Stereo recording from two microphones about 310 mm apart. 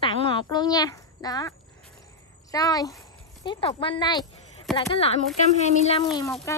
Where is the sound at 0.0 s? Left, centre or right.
Centre.